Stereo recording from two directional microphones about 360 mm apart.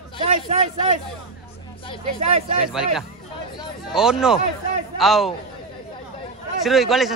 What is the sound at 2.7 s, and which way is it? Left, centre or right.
Speech, centre.